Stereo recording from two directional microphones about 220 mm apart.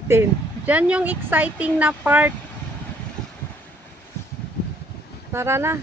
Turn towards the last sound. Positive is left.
turn(degrees=-10)  # may be behind; listen again after turning